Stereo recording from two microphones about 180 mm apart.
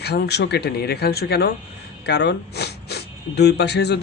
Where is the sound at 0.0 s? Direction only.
65° left (ahead or behind).